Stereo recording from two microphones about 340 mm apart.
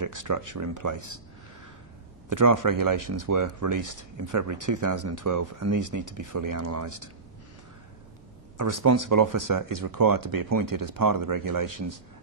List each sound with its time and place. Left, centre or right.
0.0 s speech: right
2.2 s speech: right
8.5 s speech: right